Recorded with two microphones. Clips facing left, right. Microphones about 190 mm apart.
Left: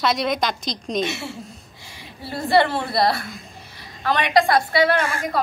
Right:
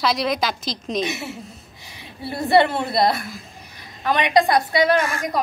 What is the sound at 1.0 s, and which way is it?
A woman's voice, 20° right (ahead or behind).